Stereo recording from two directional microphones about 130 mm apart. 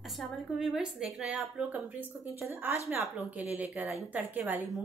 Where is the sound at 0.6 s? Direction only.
5° right (ahead or behind).